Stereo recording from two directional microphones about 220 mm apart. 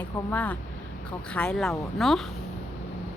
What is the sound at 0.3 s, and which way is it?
A woman's voice, 5° left (ahead or behind).